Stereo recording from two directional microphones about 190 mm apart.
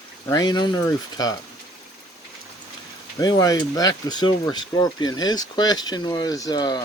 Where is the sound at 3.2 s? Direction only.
20° left (ahead or behind).